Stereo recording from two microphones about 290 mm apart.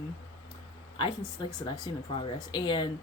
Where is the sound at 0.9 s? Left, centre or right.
Centre.